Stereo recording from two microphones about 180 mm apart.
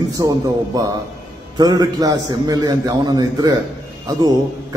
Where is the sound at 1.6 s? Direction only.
20° right (ahead or behind).